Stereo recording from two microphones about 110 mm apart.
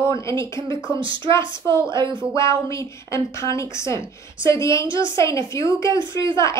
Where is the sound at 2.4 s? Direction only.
30° left (ahead or behind).